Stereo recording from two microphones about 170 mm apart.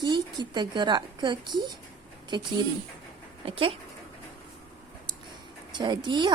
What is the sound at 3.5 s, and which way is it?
Speech, 30° right (ahead or behind).